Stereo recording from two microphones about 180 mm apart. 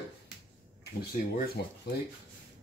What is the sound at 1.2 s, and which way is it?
Speech, 50° left (ahead or behind).